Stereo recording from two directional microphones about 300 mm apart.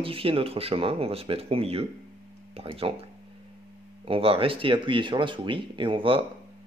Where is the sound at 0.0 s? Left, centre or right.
Centre.